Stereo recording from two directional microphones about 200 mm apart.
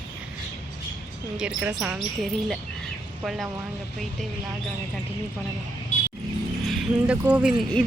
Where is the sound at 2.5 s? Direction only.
Centre (ahead or behind).